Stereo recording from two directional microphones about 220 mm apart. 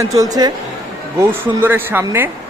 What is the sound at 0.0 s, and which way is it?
A man's voice, 15° right (ahead or behind).